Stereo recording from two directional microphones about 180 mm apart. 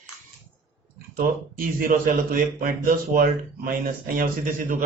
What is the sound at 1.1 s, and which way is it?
Speech, 50° right (ahead or behind).